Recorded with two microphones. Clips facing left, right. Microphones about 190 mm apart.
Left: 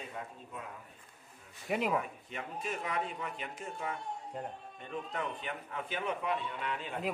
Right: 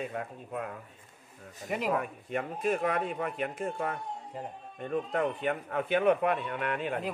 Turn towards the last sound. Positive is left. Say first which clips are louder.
# right 7 dB
turn(degrees=-60)  # may be behind; listen again after turning